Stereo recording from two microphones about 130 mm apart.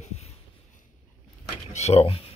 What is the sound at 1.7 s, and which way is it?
Speech, 55° left (ahead or behind).